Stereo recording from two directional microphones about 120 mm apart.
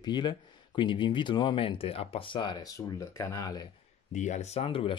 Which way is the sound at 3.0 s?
25° left (ahead or behind).